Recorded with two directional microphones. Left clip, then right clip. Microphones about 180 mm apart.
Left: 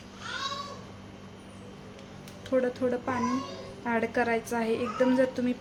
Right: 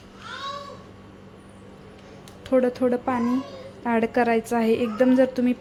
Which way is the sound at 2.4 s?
35° right (ahead or behind).